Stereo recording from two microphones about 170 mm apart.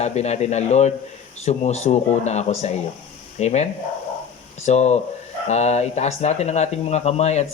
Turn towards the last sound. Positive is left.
turn(degrees=40)  # may be behind; listen again after turning